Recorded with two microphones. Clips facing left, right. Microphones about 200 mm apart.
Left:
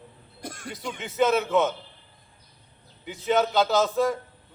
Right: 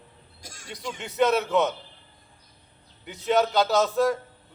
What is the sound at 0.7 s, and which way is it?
A man's voice, centre (ahead or behind).